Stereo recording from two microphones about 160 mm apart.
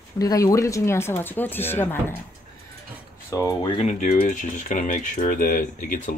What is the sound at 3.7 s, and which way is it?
Speech, 45° left (ahead or behind).